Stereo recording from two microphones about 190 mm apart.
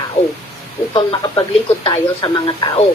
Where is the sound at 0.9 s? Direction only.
25° left (ahead or behind).